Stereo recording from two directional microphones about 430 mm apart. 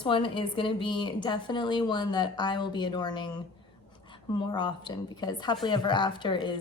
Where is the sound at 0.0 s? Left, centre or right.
Centre.